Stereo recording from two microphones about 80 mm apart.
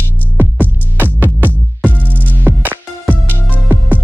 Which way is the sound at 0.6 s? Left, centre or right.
Right.